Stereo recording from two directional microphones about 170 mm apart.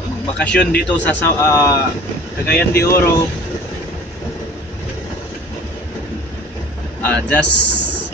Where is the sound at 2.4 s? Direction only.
65° left (ahead or behind).